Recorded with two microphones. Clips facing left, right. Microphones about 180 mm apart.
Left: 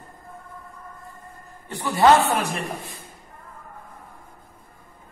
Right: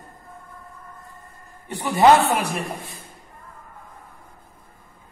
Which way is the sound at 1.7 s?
20° right (ahead or behind).